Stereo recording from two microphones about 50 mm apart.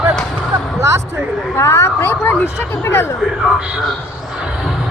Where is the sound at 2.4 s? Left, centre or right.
Left.